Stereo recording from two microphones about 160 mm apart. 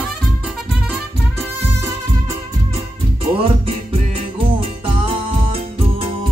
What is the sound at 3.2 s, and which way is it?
Music, 35° right (ahead or behind).